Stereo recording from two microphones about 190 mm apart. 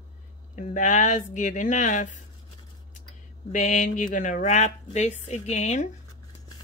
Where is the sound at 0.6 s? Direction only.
40° left (ahead or behind).